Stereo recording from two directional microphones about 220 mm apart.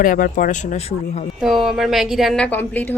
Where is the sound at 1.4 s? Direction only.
Centre (ahead or behind).